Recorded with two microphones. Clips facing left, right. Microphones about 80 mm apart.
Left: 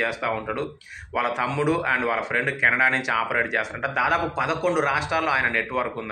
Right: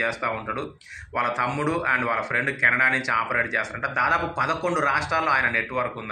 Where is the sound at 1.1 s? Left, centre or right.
Centre.